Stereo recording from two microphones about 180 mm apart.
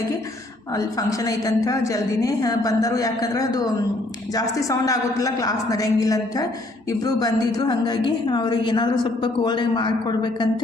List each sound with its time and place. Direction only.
0.7 s a woman's voice: 20° left (ahead or behind)